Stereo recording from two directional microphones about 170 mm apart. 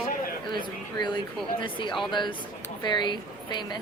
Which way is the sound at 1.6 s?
30° left (ahead or behind).